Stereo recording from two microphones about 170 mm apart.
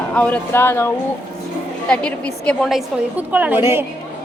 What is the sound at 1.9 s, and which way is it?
A woman's voice, 5° left (ahead or behind).